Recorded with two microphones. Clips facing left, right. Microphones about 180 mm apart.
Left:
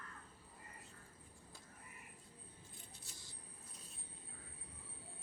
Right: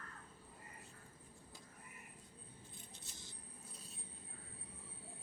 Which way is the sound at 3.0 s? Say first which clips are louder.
Right 2 dB; 20° right (ahead or behind).